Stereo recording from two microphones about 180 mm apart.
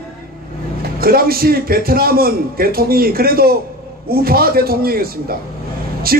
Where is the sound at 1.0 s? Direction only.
55° right (ahead or behind).